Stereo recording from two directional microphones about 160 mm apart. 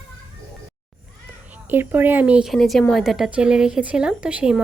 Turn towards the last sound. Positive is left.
turn(degrees=-5)  # may be behind; listen again after turning